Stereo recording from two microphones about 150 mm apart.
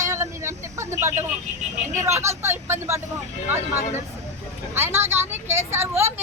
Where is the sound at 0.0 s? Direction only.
20° right (ahead or behind).